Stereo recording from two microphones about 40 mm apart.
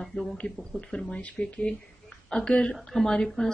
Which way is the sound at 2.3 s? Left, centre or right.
Centre.